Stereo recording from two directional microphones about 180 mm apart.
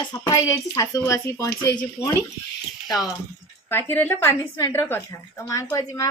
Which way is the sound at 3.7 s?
10° left (ahead or behind).